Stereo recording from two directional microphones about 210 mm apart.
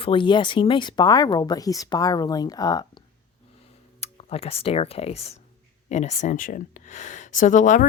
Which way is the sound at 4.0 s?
30° left (ahead or behind).